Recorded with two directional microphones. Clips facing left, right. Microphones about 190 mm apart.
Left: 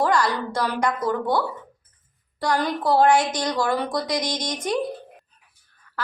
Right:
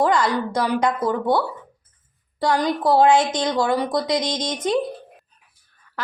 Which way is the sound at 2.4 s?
20° right (ahead or behind).